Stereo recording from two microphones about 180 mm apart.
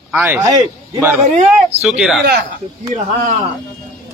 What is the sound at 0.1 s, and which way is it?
Speech, 10° right (ahead or behind).